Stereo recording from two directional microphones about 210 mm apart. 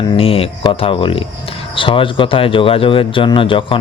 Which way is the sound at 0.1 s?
25° left (ahead or behind).